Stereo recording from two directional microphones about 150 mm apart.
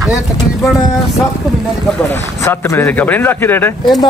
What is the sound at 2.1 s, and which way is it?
Speech, 15° left (ahead or behind).